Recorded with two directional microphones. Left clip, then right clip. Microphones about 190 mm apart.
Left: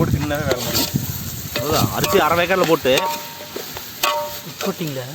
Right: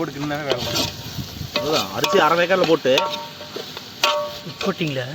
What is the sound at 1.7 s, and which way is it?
Speech, 50° left (ahead or behind).